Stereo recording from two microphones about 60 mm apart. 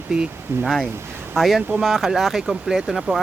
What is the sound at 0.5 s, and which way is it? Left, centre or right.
Speech, right.